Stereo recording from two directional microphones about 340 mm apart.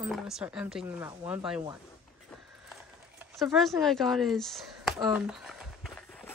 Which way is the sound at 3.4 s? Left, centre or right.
Centre.